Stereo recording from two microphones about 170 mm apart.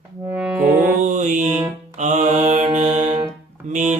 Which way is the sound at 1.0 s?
45° right (ahead or behind).